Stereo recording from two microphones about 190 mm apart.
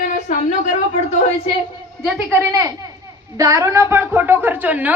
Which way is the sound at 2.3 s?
15° right (ahead or behind).